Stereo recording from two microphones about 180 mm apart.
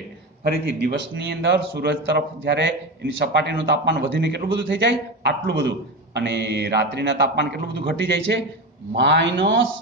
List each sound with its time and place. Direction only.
0.4 s a man's voice: 65° right (ahead or behind)
8.9 s a man's voice: 80° right